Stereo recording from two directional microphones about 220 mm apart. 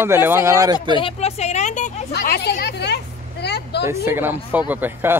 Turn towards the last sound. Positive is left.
turn(degrees=-10)  # may be behind; listen again after turning